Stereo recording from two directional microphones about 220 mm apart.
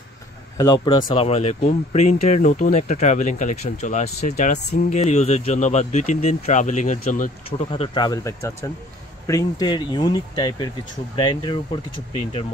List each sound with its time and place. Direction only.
0.6 s speech: 20° left (ahead or behind)